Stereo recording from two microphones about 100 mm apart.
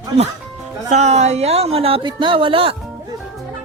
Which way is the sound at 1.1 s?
90° right.